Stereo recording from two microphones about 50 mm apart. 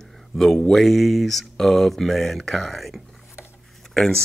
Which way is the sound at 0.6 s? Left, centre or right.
Centre.